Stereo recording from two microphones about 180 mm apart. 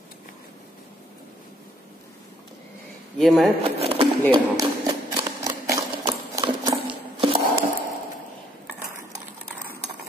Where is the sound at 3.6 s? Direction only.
30° right (ahead or behind).